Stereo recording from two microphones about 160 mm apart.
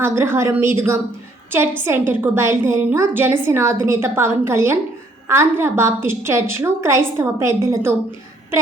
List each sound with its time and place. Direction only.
0.0 s a woman's voice: 15° right (ahead or behind)